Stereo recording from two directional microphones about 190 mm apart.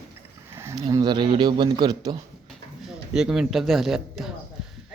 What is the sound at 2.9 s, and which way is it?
Speech, 5° right (ahead or behind).